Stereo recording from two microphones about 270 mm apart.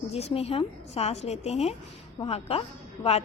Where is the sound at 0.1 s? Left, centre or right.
Left.